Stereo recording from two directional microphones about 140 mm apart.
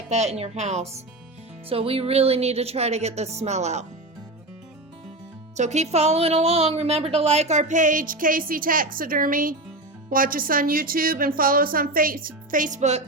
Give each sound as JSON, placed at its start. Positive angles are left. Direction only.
{"t": 0.1, "sound": "speech", "side_deg": -55}
{"t": 5.5, "sound": "a woman's voice", "side_deg": -55}